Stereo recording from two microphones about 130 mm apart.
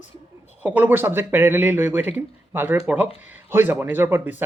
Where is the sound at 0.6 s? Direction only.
15° right (ahead or behind).